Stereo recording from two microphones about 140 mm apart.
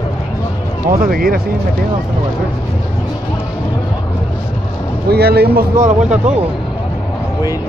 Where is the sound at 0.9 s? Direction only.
90° right.